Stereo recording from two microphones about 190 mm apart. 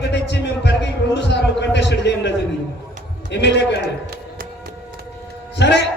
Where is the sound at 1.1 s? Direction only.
65° left (ahead or behind).